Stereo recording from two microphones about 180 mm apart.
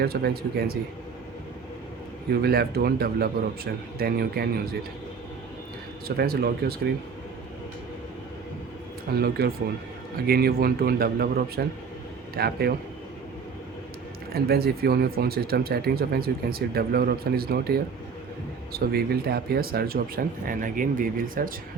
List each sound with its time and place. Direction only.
0.0 s speech: 60° right (ahead or behind)
2.3 s speech: 60° right (ahead or behind)
6.1 s speech: 60° right (ahead or behind)
9.1 s speech: 60° right (ahead or behind)
14.3 s speech: 60° right (ahead or behind)